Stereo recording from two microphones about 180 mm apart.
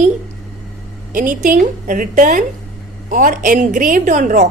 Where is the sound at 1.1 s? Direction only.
45° right (ahead or behind).